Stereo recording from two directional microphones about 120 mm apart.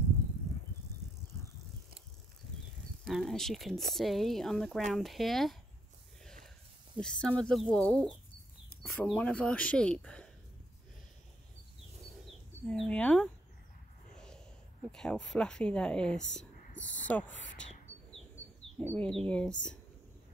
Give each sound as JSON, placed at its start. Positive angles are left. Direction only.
{"t": 3.1, "sound": "speech", "side_deg": 0}
{"t": 6.2, "sound": "a sound", "side_deg": 5}
{"t": 7.0, "sound": "speech", "side_deg": 5}
{"t": 12.3, "sound": "speech", "side_deg": 5}
{"t": 14.1, "sound": "a sound", "side_deg": 5}
{"t": 14.9, "sound": "speech", "side_deg": 5}
{"t": 17.9, "sound": "bird", "side_deg": 15}
{"t": 18.8, "sound": "speech", "side_deg": 10}